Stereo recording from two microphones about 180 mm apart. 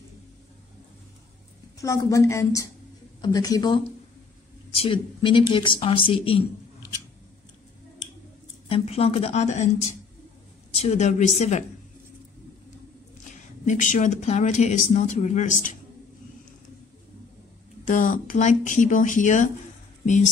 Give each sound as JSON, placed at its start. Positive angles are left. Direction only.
{"t": 1.8, "sound": "a woman's voice", "side_deg": 20}
{"t": 8.6, "sound": "speech", "side_deg": 35}
{"t": 13.7, "sound": "speech", "side_deg": 45}
{"t": 17.8, "sound": "speech", "side_deg": 45}